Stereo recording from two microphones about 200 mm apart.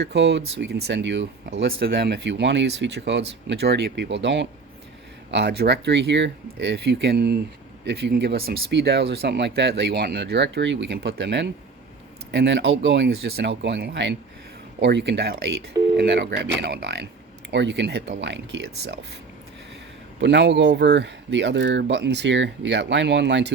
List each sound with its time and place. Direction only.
0.0 s speech: 60° right (ahead or behind)
20.2 s speech: 60° right (ahead or behind)